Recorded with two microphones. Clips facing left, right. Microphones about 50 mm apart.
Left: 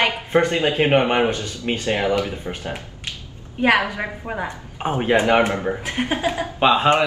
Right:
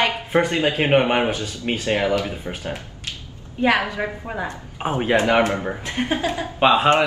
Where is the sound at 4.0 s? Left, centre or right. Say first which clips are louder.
Even; centre.